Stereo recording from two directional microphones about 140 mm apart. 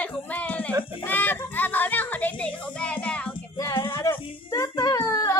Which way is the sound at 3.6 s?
25° left (ahead or behind).